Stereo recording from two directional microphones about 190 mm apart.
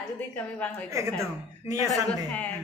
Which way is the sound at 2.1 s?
10° left (ahead or behind).